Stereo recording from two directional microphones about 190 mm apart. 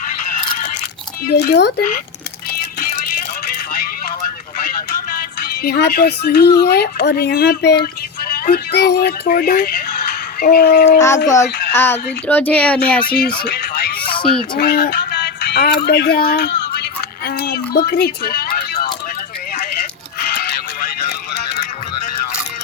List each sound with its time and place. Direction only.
1.3 s speech: 60° left (ahead or behind)
4.6 s vehicle: 45° left (ahead or behind)
5.6 s speech: 55° left (ahead or behind)
11.7 s speech: 10° left (ahead or behind)
13.4 s music: 55° left (ahead or behind)
14.5 s speech: 55° left (ahead or behind)